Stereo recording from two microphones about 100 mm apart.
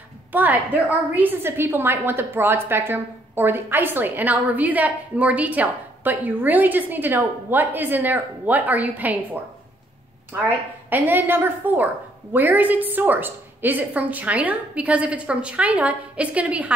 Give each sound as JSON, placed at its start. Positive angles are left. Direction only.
{"t": 0.3, "sound": "a woman's voice", "side_deg": -15}
{"t": 10.9, "sound": "a woman's voice", "side_deg": -20}